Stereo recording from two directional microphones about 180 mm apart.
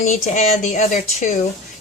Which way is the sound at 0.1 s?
40° left (ahead or behind).